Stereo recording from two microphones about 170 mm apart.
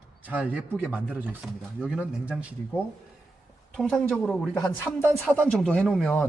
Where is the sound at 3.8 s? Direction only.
5° left (ahead or behind).